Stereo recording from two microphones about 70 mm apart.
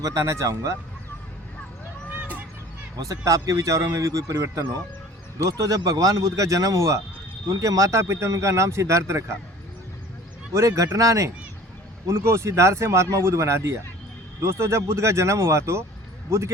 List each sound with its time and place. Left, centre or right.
0.0 s speech: right
3.0 s speech: right
5.5 s speech: right
10.5 s speech: right
12.0 s speech: right